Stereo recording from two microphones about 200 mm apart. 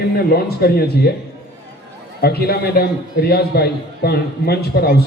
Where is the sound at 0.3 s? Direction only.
50° left (ahead or behind).